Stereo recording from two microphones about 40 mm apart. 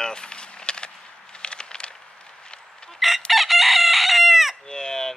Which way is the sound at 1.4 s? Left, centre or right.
Left.